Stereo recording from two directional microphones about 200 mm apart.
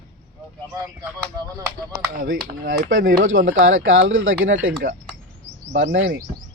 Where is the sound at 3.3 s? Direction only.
80° right.